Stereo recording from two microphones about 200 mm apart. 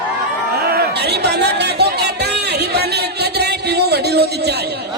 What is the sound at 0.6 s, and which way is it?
Music, 50° right (ahead or behind).